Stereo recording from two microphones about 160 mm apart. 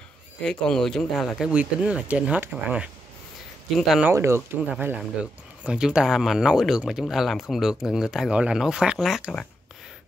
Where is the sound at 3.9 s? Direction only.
5° right (ahead or behind).